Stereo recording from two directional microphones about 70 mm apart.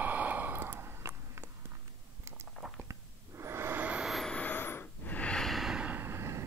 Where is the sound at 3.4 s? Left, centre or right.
Right.